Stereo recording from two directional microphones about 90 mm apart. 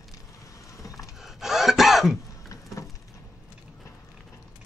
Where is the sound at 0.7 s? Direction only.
35° left (ahead or behind).